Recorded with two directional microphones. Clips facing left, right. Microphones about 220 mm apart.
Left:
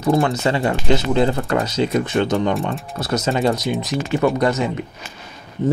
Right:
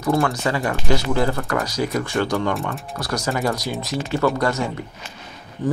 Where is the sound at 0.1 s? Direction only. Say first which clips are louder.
Left 3 dB; 20° left (ahead or behind).